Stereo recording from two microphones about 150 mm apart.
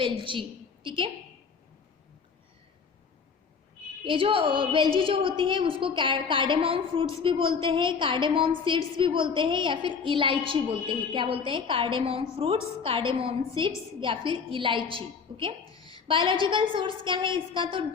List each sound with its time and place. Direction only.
0.0 s a woman's voice: 35° right (ahead or behind)
4.0 s a woman's voice: 35° right (ahead or behind)
15.7 s a sound: 25° left (ahead or behind)
16.0 s a woman's voice: 35° right (ahead or behind)